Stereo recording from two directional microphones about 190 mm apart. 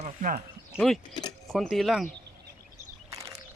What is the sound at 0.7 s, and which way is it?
Speech, centre (ahead or behind).